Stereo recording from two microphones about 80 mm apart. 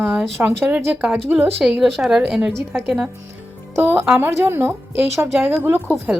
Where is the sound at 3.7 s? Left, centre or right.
Right.